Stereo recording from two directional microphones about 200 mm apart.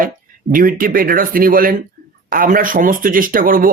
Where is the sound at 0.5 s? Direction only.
45° right (ahead or behind).